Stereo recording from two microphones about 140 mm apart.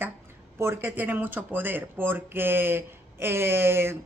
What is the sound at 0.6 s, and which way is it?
Speech, 20° right (ahead or behind).